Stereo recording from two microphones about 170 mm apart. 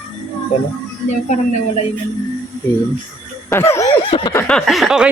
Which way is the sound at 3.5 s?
15° left (ahead or behind).